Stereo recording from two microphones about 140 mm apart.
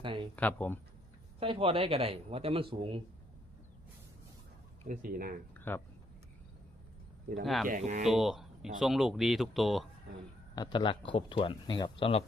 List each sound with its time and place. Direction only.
0.0 s a sound: 35° right (ahead or behind)
0.3 s speech: 10° left (ahead or behind)
1.4 s a man's voice: 40° right (ahead or behind)
4.9 s speech: 90° right
5.5 s a sound: 15° left (ahead or behind)
7.4 s speech: centre (ahead or behind)
7.7 s speech: 60° right (ahead or behind)
8.0 s speech: centre (ahead or behind)
10.5 s speech: 30° left (ahead or behind)